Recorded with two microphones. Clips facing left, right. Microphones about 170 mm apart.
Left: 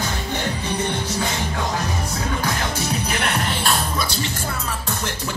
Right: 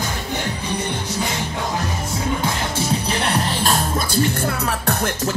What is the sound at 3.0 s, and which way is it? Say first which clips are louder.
Music: right 2 dB; 30° right (ahead or behind).